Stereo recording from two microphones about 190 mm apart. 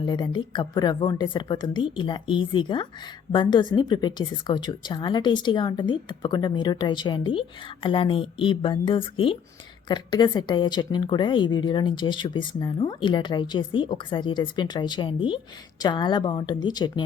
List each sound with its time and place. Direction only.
0.0 s a woman's voice: 25° left (ahead or behind)